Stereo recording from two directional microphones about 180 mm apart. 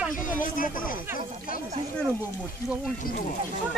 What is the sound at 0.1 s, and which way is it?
Speech, 50° left (ahead or behind).